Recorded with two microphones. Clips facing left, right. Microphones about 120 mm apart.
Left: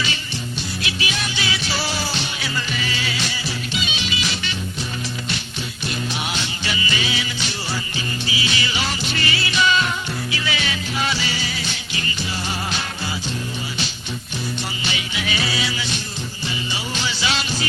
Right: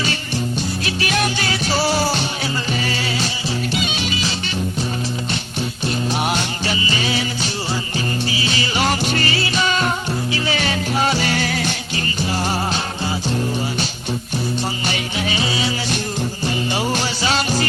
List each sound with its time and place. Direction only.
0.9 s music: 45° right (ahead or behind)
6.2 s music: 50° right (ahead or behind)
6.7 s music: 35° right (ahead or behind); by 11.7 s 55° right (ahead or behind)
14.8 s music: 40° right (ahead or behind)
16.7 s music: 45° right (ahead or behind)